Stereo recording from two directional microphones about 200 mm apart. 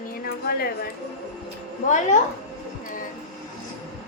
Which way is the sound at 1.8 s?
40° left (ahead or behind).